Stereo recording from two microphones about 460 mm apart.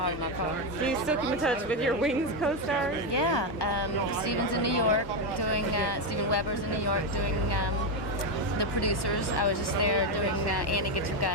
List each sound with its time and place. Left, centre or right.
0.9 s a woman's voice: centre
3.2 s speech: left
8.5 s speech: left